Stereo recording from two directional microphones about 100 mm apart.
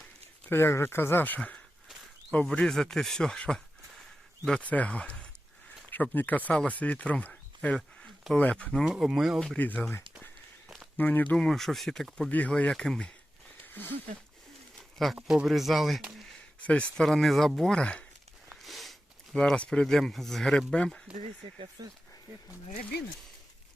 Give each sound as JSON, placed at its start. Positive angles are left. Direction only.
{"t": 0.4, "sound": "speech", "side_deg": 25}
{"t": 7.8, "sound": "a sound", "side_deg": 5}
{"t": 8.4, "sound": "speech", "side_deg": 15}
{"t": 8.8, "sound": "speech", "side_deg": -5}
{"t": 9.6, "sound": "speech", "side_deg": 15}
{"t": 10.9, "sound": "speech", "side_deg": 20}
{"t": 11.3, "sound": "speech", "side_deg": 5}
{"t": 12.3, "sound": "speech", "side_deg": 15}
{"t": 14.9, "sound": "speech", "side_deg": 0}
{"t": 21.8, "sound": "speech", "side_deg": -40}